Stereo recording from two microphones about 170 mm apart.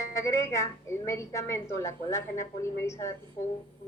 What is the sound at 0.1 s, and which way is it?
Speech, 15° left (ahead or behind).